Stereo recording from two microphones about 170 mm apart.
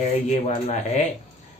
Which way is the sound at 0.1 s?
40° left (ahead or behind).